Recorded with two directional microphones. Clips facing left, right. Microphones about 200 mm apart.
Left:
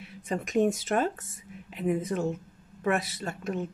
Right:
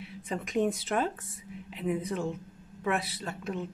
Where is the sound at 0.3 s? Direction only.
45° left (ahead or behind).